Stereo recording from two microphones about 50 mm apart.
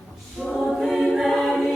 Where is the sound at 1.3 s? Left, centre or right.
Centre.